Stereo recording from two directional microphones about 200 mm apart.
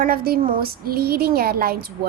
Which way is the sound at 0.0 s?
45° right (ahead or behind).